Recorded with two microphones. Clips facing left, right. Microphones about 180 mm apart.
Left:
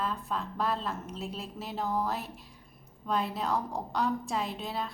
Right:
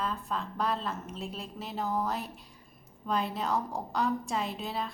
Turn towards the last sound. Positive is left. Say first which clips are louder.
# even
turn(degrees=0)  # may be behind; listen again after turning